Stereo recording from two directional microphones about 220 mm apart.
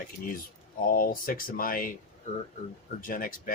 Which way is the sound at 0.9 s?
40° left (ahead or behind).